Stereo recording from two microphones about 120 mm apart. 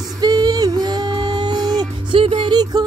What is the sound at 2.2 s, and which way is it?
Music, 50° right (ahead or behind).